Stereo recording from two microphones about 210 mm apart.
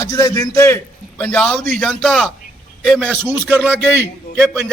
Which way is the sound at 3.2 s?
10° right (ahead or behind).